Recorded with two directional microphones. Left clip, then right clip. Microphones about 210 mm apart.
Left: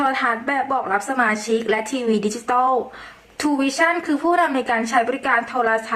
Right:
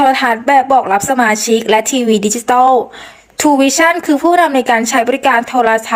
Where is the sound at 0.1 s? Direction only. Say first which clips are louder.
Right 10 dB; 35° right (ahead or behind).